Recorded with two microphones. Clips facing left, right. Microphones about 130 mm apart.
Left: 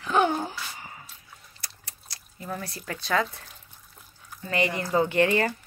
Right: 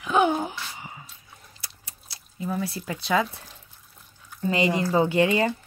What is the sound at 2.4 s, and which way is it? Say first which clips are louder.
Speech: right 6 dB; 5° right (ahead or behind).